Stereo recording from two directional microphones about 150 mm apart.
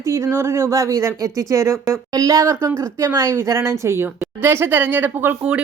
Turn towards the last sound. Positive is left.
turn(degrees=-10)  # may be behind; listen again after turning